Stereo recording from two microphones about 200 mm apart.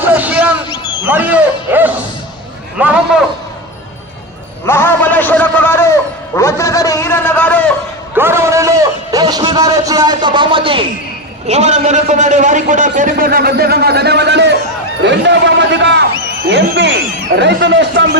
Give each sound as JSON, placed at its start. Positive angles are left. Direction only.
{"t": 0.1, "sound": "a sound", "side_deg": -5}
{"t": 1.0, "sound": "speech", "side_deg": -10}
{"t": 4.6, "sound": "a man's voice", "side_deg": 10}
{"t": 8.1, "sound": "a man's voice", "side_deg": -10}